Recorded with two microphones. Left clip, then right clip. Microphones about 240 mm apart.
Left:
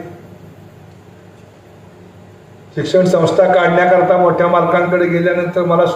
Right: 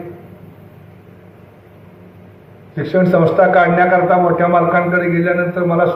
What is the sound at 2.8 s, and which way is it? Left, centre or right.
A man's voice, left.